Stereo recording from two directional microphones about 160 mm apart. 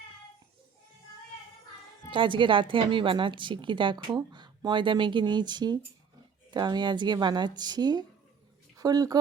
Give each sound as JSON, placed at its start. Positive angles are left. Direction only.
{"t": 2.0, "sound": "a woman's voice", "side_deg": -30}